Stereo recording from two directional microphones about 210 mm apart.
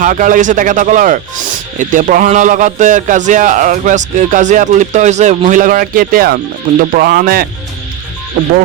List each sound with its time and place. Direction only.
0.0 s a man's voice: 40° right (ahead or behind)